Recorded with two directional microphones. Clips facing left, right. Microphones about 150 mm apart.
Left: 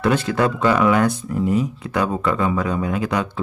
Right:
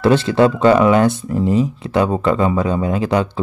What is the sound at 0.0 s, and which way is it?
Speech, 30° right (ahead or behind).